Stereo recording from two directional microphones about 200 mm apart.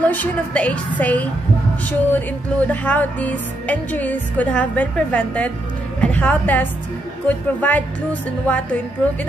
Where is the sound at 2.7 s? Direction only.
10° left (ahead or behind).